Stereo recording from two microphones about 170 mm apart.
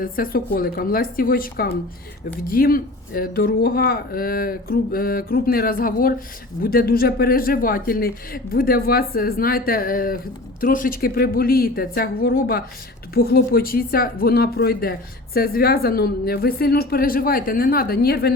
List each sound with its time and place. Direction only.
0.0 s speech: 55° left (ahead or behind)